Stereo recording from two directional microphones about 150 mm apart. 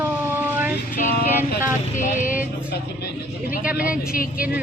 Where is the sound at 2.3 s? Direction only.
10° right (ahead or behind).